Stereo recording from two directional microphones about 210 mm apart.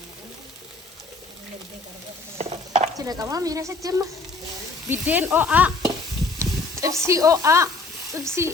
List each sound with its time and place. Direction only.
2.4 s stir: 30° right (ahead or behind)
3.0 s speech: 15° right (ahead or behind)